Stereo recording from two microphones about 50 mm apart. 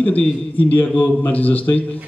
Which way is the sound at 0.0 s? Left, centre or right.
Left.